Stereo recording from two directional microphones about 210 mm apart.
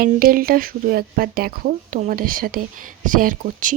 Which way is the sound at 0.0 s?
45° right (ahead or behind).